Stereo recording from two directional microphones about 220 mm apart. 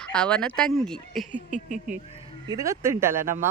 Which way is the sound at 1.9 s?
15° right (ahead or behind).